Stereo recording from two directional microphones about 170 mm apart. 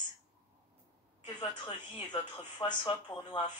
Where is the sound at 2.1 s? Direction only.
25° left (ahead or behind).